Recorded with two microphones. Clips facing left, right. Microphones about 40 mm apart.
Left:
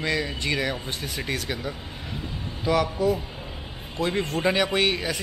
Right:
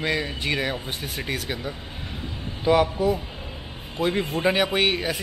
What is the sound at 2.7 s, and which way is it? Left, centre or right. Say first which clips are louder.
A man's voice: right 3 dB; right.